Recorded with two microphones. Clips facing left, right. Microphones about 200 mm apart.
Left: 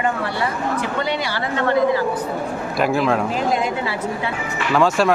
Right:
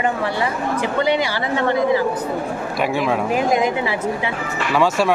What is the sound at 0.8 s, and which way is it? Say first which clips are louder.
Speech: right 4 dB; 15° right (ahead or behind).